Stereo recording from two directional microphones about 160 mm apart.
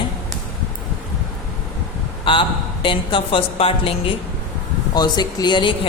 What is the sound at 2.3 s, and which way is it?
A woman's voice, 35° left (ahead or behind).